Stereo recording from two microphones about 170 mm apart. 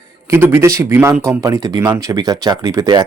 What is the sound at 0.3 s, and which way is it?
Speech, 15° right (ahead or behind).